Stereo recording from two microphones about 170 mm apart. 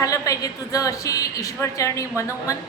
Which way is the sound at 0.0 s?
20° left (ahead or behind).